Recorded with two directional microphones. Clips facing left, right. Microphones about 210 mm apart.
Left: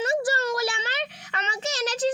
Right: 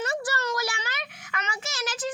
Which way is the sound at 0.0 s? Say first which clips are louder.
Left 5 dB; 25° left (ahead or behind).